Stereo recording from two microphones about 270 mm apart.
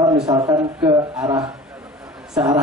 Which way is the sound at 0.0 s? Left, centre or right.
Centre.